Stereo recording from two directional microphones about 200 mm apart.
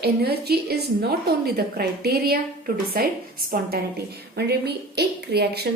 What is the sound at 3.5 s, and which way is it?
A woman's voice, 50° right (ahead or behind).